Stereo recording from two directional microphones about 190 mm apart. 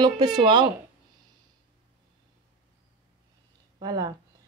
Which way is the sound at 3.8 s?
20° right (ahead or behind).